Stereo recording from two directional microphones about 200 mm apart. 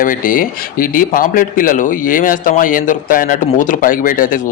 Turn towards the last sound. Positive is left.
turn(degrees=40)  # may be behind; listen again after turning